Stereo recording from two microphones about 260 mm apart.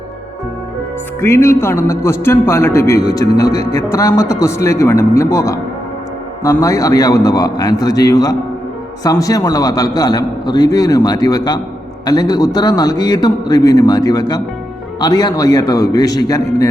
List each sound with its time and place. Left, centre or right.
1.2 s a man's voice: centre